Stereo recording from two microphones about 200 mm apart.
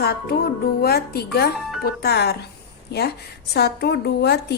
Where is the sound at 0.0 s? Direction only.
50° left (ahead or behind).